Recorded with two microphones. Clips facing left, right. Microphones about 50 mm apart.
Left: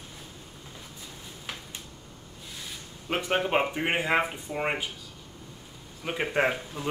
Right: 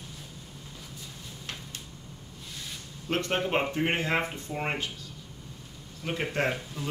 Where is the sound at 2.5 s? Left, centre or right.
Centre.